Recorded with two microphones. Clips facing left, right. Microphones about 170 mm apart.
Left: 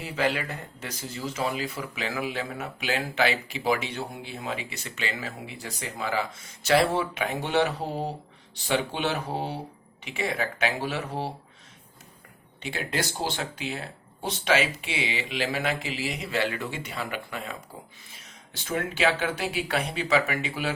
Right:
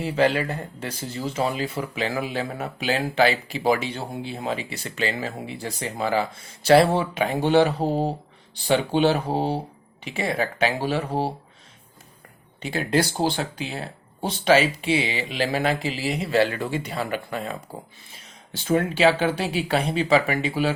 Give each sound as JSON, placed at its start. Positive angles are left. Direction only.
{"t": 0.0, "sound": "speech", "side_deg": -30}
{"t": 12.6, "sound": "speech", "side_deg": -40}